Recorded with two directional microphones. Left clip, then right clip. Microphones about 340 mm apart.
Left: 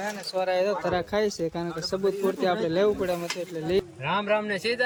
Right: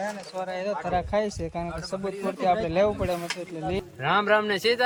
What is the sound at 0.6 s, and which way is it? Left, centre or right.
Speech, centre.